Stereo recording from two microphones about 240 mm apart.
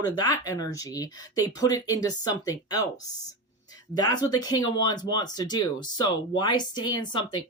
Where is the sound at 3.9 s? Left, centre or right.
Centre.